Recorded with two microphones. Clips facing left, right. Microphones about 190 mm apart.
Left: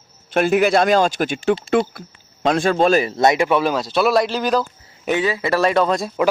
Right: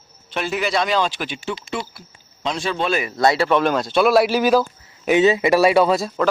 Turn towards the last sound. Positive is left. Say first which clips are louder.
# right 2 dB
turn(degrees=-5)  # may be behind; listen again after turning